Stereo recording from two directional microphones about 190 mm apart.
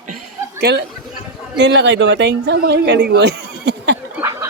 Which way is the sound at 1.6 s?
65° right (ahead or behind).